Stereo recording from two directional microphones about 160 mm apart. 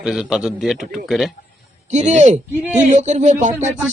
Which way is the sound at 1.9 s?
45° right (ahead or behind).